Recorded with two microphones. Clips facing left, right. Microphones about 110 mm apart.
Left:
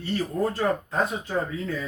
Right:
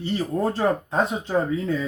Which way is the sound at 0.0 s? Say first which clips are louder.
Right 2 dB; 25° right (ahead or behind).